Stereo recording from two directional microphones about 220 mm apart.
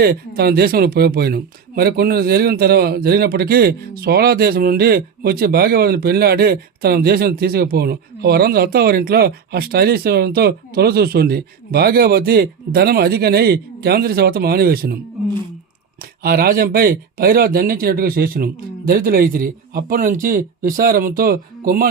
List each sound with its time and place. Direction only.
0.0 s speech: 45° right (ahead or behind)
16.2 s speech: 45° right (ahead or behind)